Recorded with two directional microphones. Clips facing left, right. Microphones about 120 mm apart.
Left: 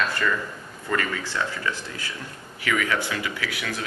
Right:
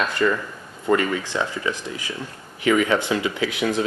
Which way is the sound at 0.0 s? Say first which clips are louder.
Right 4 dB; 20° right (ahead or behind).